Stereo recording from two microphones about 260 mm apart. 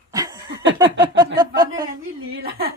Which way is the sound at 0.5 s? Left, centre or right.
Right.